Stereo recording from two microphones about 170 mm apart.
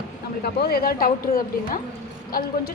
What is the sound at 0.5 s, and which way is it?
Speech, 65° left (ahead or behind).